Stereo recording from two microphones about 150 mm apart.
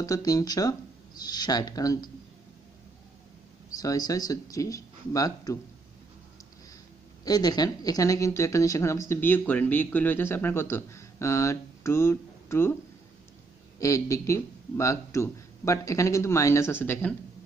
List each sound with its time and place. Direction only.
0.0 s speech: 25° left (ahead or behind)
3.7 s speech: 25° left (ahead or behind)
7.2 s speech: 25° left (ahead or behind)
13.7 s speech: 20° left (ahead or behind)